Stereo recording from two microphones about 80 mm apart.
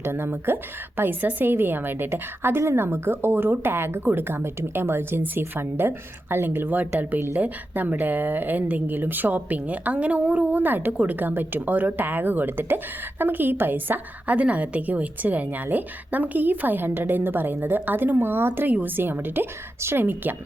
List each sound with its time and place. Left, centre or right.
0.0 s speech: right